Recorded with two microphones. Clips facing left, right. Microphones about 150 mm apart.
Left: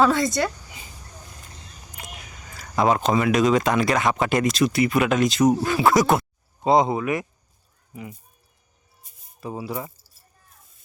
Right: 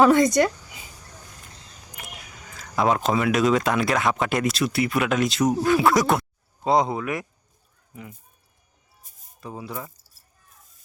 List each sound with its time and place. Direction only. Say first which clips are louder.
0.0 s speech: right 3 dB; 15° right (ahead or behind)
2.7 s speech: left 2 dB; centre (ahead or behind)
9.4 s speech: left 4 dB; 5° left (ahead or behind)